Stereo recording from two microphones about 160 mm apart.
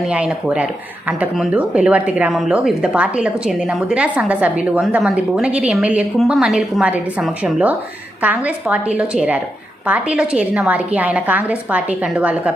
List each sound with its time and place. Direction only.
0.0 s a woman's voice: 5° right (ahead or behind)